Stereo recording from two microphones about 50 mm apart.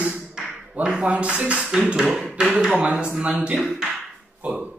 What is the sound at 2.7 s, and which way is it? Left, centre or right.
Speech, right.